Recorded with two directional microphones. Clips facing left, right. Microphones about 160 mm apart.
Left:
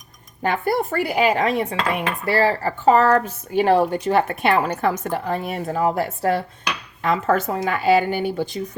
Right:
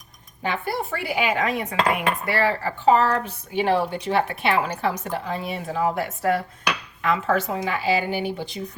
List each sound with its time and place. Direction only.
0.4 s dishes: 50° left (ahead or behind)